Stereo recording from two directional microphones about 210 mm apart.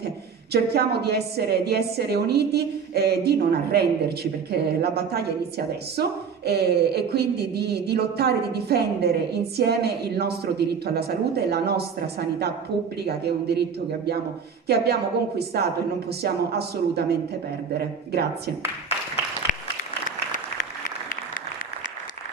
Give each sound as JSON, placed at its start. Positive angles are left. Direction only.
{"t": 0.0, "sound": "a woman's voice", "side_deg": -50}